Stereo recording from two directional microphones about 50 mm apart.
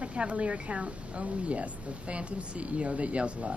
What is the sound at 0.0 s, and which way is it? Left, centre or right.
A woman's voice, right.